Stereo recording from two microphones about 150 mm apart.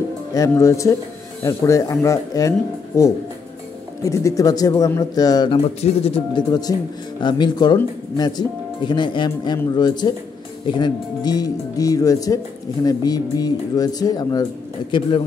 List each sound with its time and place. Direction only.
0.3 s speech: 20° left (ahead or behind)
4.0 s speech: 20° left (ahead or behind)
5.8 s speech: 45° left (ahead or behind)